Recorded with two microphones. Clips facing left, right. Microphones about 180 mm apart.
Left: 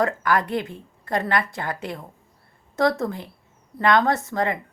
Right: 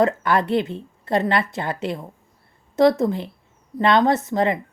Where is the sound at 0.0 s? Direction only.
25° right (ahead or behind).